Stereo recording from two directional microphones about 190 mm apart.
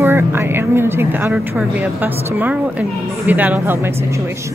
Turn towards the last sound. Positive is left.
turn(degrees=-10)  # may be behind; listen again after turning